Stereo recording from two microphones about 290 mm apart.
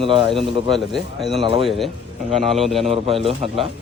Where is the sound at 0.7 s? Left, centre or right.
Centre.